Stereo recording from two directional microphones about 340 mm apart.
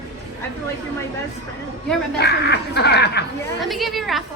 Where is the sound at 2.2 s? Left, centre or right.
Left.